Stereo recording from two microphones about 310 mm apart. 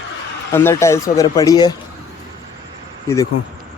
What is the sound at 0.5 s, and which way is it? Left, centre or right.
Speech, centre.